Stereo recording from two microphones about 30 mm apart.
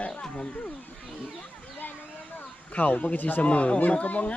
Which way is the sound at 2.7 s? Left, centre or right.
Left.